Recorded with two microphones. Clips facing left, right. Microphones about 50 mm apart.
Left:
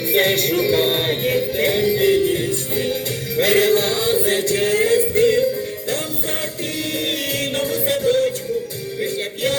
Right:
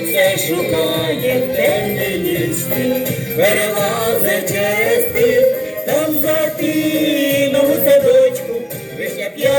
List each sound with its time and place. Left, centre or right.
0.1 s music: centre